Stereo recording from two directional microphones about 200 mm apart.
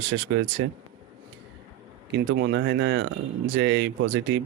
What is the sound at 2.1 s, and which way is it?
Speech, 60° right (ahead or behind).